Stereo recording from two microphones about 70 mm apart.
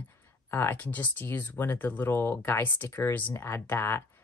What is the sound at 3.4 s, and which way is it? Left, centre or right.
Speech, left.